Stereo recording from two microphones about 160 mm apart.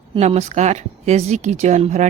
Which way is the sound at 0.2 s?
45° right (ahead or behind).